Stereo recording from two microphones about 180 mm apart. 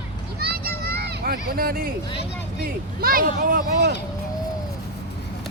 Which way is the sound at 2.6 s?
55° right (ahead or behind).